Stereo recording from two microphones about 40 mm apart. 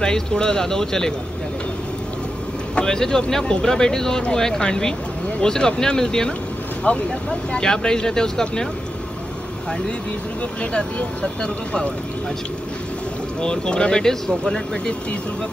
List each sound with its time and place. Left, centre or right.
0.0 s speech: centre
2.7 s speech: centre
6.8 s speech: left
7.5 s speech: centre
10.6 s speech: left
13.4 s speech: left